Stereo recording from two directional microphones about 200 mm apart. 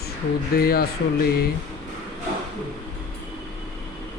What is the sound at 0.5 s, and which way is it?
Speech, 50° left (ahead or behind).